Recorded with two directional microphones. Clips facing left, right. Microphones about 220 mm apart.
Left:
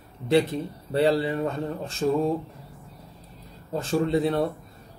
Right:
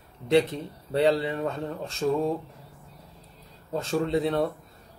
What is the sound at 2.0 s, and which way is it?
Speech, 15° left (ahead or behind).